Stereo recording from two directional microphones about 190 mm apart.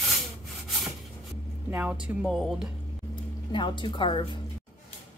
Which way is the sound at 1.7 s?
5° right (ahead or behind).